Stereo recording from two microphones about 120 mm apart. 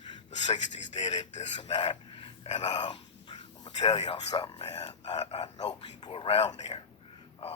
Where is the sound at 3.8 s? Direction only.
60° left (ahead or behind).